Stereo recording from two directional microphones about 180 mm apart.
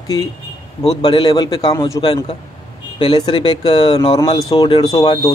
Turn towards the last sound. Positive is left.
turn(degrees=20)  # may be behind; listen again after turning